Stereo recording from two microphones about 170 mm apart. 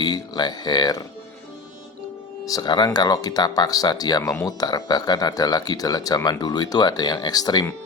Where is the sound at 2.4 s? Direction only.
25° left (ahead or behind).